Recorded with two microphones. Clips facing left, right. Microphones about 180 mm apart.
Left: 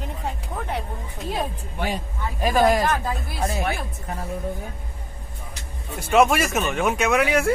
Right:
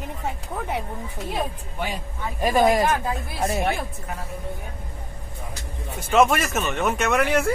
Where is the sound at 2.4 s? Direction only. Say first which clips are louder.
Even; 5° right (ahead or behind).